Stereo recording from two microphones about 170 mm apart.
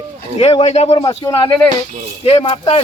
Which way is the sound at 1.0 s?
25° left (ahead or behind).